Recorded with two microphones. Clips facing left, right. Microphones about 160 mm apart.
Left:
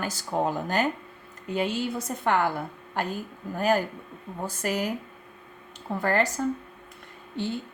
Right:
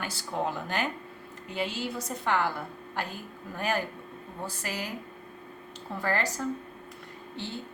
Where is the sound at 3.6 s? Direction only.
40° left (ahead or behind).